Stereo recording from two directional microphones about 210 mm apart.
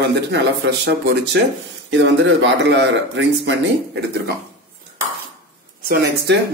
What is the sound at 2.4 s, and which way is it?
Speech, 55° right (ahead or behind).